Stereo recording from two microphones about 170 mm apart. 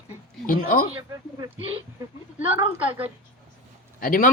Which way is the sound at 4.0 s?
55° left (ahead or behind).